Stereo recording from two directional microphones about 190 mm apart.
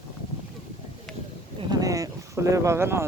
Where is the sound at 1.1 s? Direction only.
Centre (ahead or behind).